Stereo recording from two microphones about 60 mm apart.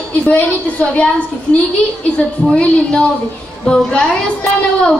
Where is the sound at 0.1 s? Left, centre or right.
Left.